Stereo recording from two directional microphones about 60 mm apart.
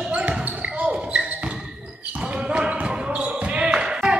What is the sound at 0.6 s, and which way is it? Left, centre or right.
Basketball bounce, right.